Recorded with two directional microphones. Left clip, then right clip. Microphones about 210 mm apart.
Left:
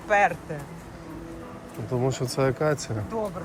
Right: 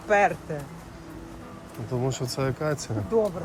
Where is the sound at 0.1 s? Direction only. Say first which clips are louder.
Even; 50° right (ahead or behind).